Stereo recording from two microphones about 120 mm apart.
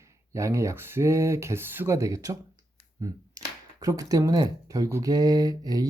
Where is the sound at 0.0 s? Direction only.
25° right (ahead or behind).